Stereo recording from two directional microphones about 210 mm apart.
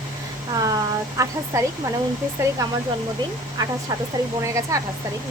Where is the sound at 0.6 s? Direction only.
15° right (ahead or behind).